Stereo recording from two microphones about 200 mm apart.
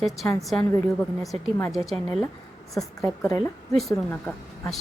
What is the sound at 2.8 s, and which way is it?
Speech, 15° left (ahead or behind).